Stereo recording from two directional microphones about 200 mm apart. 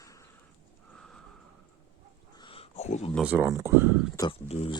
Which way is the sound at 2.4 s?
25° left (ahead or behind).